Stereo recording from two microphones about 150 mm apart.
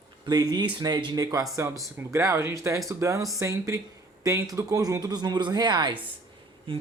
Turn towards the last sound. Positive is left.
turn(degrees=-35)  # may be behind; listen again after turning